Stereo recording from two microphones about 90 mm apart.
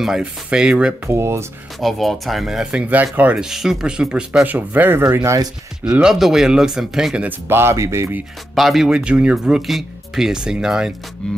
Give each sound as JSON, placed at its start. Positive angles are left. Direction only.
{"t": 0.0, "sound": "speech", "side_deg": -10}
{"t": 1.0, "sound": "speech", "side_deg": -30}
{"t": 1.8, "sound": "speech", "side_deg": 0}
{"t": 3.4, "sound": "speech", "side_deg": -5}
{"t": 5.1, "sound": "speech", "side_deg": -30}
{"t": 5.9, "sound": "speech", "side_deg": -10}
{"t": 7.2, "sound": "speech", "side_deg": -25}
{"t": 8.5, "sound": "speech", "side_deg": 0}
{"t": 11.2, "sound": "music", "side_deg": 10}